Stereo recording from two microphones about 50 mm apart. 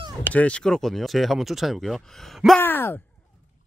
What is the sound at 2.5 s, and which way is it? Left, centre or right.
Speech, left.